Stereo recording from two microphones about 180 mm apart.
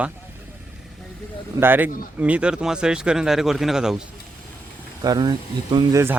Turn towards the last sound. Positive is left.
turn(degrees=-25)  # may be behind; listen again after turning